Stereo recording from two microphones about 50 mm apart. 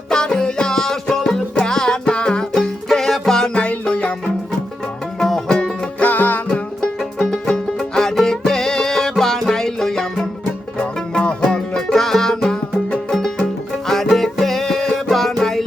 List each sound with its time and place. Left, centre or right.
0.1 s music: centre
2.5 s music: centre
3.5 s music: left
6.0 s music: left
6.5 s music: centre
10.8 s music: centre
11.7 s music: centre